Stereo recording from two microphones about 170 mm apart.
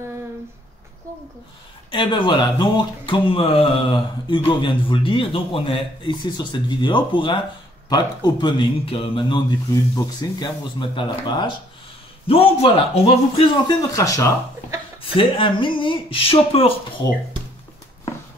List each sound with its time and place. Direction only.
1.9 s speech: 25° left (ahead or behind)
13.9 s speech: 20° left (ahead or behind)
15.0 s speech: 30° left (ahead or behind)